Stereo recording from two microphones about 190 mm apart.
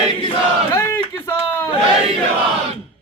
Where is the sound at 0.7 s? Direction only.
10° left (ahead or behind).